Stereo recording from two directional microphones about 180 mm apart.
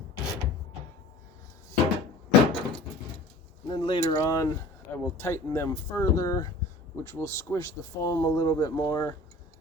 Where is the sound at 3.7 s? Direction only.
25° left (ahead or behind).